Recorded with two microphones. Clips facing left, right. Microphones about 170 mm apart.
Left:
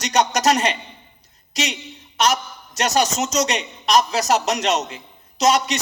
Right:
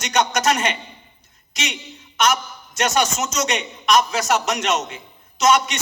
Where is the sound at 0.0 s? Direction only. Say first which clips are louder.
Left 1 dB; 35° left (ahead or behind).